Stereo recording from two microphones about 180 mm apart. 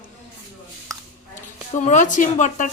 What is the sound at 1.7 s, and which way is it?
Speech, 40° left (ahead or behind).